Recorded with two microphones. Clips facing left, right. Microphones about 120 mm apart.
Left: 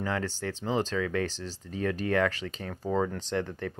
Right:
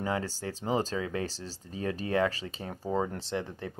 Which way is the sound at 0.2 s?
35° right (ahead or behind).